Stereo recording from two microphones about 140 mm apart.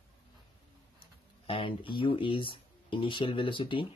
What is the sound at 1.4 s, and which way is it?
Speech, 40° left (ahead or behind).